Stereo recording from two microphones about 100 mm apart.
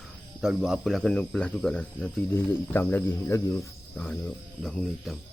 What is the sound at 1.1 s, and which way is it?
Speech, 10° left (ahead or behind).